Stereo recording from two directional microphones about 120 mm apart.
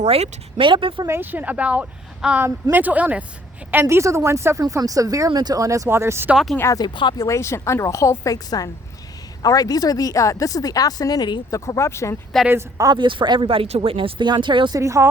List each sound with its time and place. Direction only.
0.0 s speech: 60° right (ahead or behind)
0.7 s speech: 45° right (ahead or behind)
1.0 s a woman's voice: 20° right (ahead or behind)
6.3 s speech: centre (ahead or behind)
6.6 s a woman's voice: 25° left (ahead or behind)
6.8 s speech: 40° left (ahead or behind)
7.3 s a woman's voice: 25° left (ahead or behind)
12.5 s speech: 20° right (ahead or behind)
12.9 s speech: 40° right (ahead or behind)
14.8 s speech: 25° right (ahead or behind)